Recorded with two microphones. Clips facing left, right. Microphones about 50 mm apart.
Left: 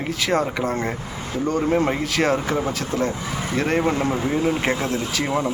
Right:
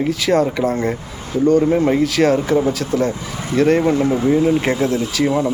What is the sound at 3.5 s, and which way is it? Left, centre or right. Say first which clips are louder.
Speech: right 7 dB; centre.